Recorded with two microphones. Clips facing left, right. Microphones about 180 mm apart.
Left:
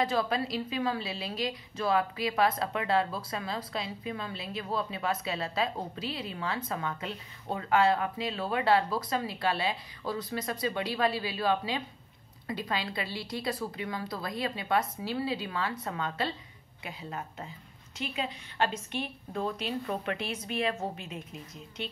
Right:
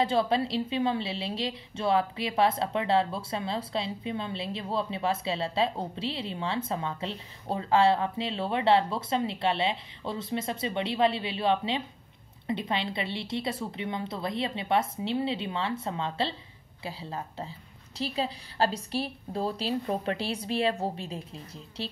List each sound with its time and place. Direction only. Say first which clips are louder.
0.0 s a woman's voice: right 3 dB; 30° right (ahead or behind)